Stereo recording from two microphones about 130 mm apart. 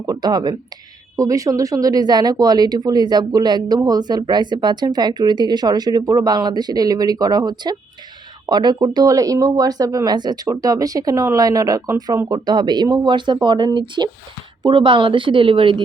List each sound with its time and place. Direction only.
0.0 s speech: 30° right (ahead or behind)